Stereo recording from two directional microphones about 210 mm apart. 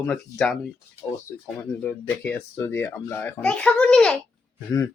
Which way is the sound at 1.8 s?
5° left (ahead or behind).